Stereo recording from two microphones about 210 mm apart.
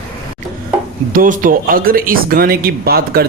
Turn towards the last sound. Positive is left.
turn(degrees=-45)  # may be behind; listen again after turning